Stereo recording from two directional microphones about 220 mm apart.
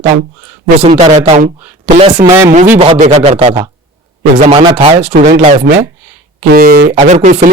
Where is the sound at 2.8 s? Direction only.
30° right (ahead or behind).